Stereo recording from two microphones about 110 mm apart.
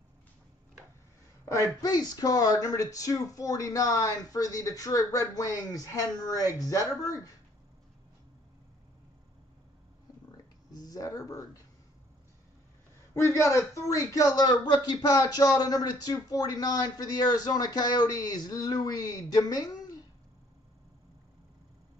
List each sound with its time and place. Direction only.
1.8 s speech: 35° left (ahead or behind)
10.3 s a sound: 35° left (ahead or behind)
13.1 s speech: 25° left (ahead or behind)